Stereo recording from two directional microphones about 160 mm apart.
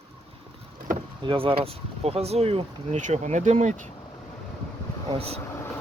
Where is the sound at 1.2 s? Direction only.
35° right (ahead or behind).